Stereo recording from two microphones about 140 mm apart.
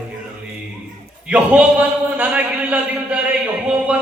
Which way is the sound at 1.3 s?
10° right (ahead or behind).